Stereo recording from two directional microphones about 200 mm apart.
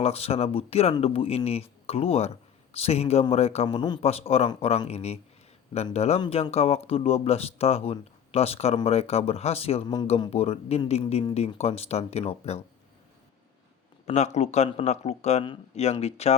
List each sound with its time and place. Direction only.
0.0 s speech: 30° left (ahead or behind)
14.0 s speech: 35° left (ahead or behind)